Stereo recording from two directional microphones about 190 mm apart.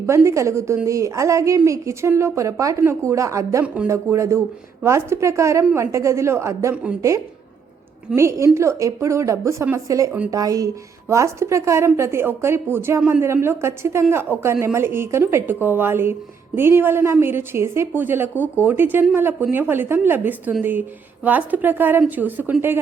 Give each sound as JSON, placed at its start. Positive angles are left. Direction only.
{"t": 0.0, "sound": "a woman's voice", "side_deg": -15}